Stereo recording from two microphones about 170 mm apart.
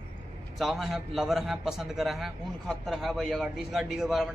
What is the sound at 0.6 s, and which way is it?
A man's voice, centre (ahead or behind).